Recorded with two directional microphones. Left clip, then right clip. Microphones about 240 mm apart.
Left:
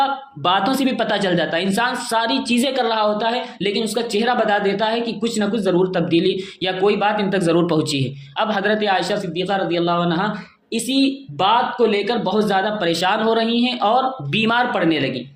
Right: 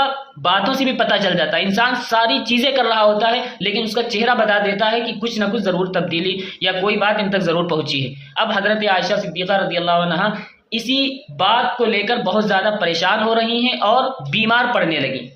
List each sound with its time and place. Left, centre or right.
0.0 s a woman's voice: left